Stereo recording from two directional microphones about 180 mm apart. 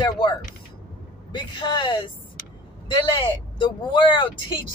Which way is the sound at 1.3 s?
25° left (ahead or behind).